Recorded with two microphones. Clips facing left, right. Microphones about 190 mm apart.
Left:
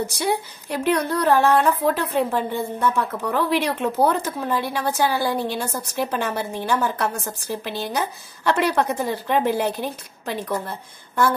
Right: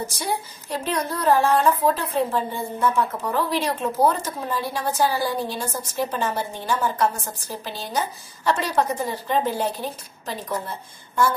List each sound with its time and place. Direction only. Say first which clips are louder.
0.0 s speech: left 4 dB; 65° left (ahead or behind)